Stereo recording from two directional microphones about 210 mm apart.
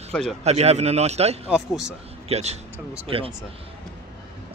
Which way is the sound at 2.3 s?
30° right (ahead or behind).